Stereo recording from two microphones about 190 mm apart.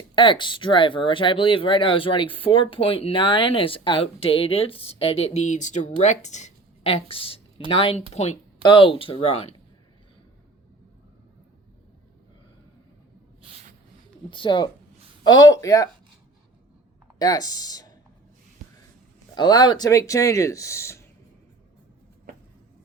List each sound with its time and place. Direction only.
0.2 s speech: 25° left (ahead or behind)
13.4 s a sound: 30° right (ahead or behind)
14.3 s speech: 25° left (ahead or behind)
17.2 s speech: 20° left (ahead or behind)
19.3 s speech: 20° left (ahead or behind)